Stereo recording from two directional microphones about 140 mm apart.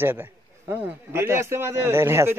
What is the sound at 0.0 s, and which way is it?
Speech, 15° right (ahead or behind).